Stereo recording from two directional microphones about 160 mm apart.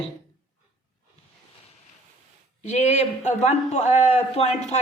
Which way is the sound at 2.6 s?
45° left (ahead or behind).